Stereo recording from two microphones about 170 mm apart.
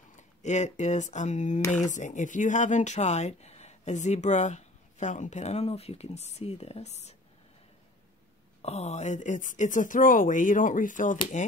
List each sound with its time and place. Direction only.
0.1 s speech: 45° left (ahead or behind)
8.6 s speech: 40° left (ahead or behind)